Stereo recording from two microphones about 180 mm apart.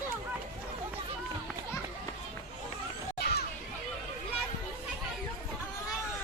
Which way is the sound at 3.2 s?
60° left (ahead or behind).